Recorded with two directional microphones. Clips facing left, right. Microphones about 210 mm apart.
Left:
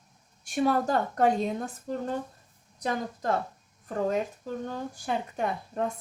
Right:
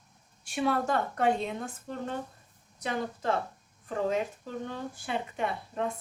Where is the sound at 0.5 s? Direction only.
40° left (ahead or behind).